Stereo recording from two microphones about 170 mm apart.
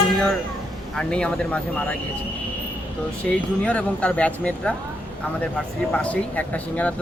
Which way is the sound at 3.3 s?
5° left (ahead or behind).